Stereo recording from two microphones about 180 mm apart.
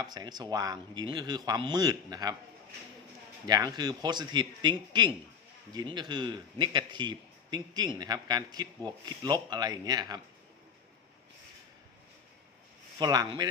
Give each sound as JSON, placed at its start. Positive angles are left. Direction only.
{"t": 0.0, "sound": "speech", "side_deg": -20}
{"t": 3.4, "sound": "speech", "side_deg": -20}
{"t": 13.0, "sound": "speech", "side_deg": -20}